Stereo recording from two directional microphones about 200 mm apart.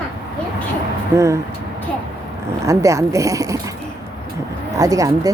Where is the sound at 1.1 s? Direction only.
15° right (ahead or behind).